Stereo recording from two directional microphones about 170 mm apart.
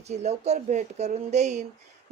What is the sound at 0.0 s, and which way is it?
A woman's voice, 40° right (ahead or behind).